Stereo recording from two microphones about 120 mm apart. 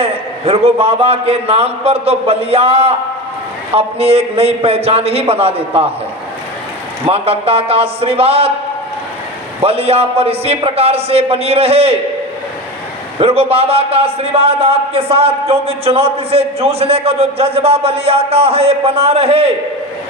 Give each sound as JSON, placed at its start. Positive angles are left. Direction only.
{"t": 0.0, "sound": "a man's voice", "side_deg": -55}
{"t": 7.1, "sound": "a man's voice", "side_deg": -55}
{"t": 9.6, "sound": "a man's voice", "side_deg": -55}
{"t": 13.1, "sound": "a man's voice", "side_deg": -55}